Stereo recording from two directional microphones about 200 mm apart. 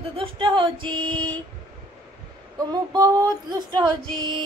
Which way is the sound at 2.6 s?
20° right (ahead or behind).